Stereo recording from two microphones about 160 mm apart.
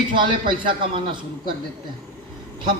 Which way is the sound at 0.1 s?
30° right (ahead or behind).